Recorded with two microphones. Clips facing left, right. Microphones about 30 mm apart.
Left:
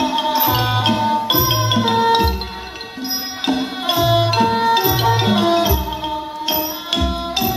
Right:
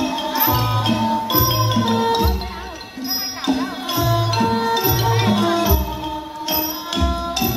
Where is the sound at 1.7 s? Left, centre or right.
Left.